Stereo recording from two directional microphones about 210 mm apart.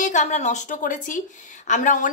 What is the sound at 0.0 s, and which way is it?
Speech, 35° left (ahead or behind).